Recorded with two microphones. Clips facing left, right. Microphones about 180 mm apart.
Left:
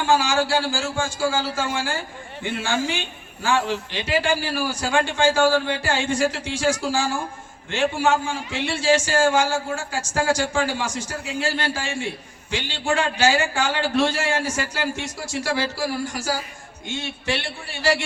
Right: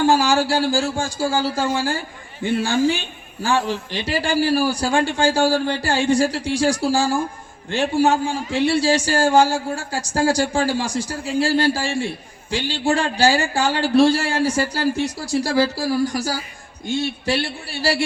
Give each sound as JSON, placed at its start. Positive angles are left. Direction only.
{"t": 0.0, "sound": "a man's voice", "side_deg": -35}